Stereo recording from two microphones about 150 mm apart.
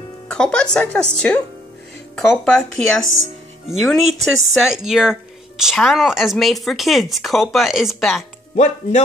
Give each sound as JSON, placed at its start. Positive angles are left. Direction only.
{"t": 0.3, "sound": "speech", "side_deg": 5}
{"t": 8.5, "sound": "speech", "side_deg": 50}